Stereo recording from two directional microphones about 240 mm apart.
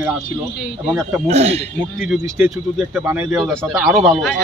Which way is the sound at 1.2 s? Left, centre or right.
Right.